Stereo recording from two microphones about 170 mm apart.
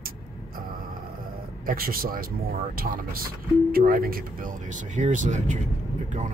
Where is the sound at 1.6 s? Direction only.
60° right (ahead or behind).